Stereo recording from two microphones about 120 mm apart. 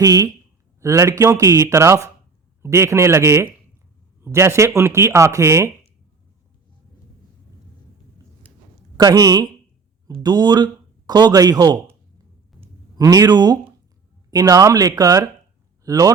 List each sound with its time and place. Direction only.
0.0 s speech: 30° right (ahead or behind)
9.0 s speech: 30° right (ahead or behind)
13.0 s speech: 30° right (ahead or behind)